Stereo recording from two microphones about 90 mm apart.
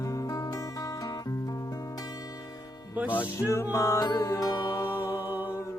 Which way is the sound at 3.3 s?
35° left (ahead or behind).